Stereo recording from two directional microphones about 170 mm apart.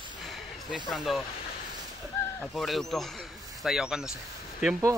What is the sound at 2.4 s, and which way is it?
Speech, centre (ahead or behind).